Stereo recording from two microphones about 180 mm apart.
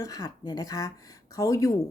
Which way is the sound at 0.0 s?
20° left (ahead or behind).